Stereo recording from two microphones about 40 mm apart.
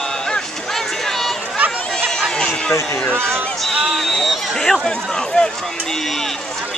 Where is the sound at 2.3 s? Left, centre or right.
Centre.